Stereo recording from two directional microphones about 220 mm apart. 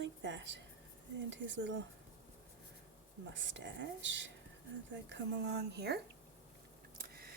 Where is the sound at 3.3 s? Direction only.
55° right (ahead or behind).